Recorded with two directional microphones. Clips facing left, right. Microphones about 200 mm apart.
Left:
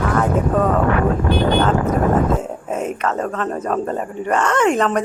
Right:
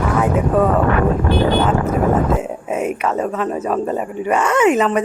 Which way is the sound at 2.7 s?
10° right (ahead or behind).